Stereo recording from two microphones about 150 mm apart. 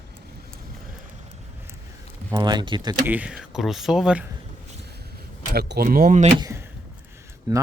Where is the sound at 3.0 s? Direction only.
10° right (ahead or behind).